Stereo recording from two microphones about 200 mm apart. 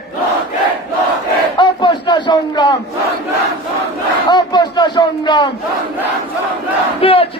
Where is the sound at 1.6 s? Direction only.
25° left (ahead or behind).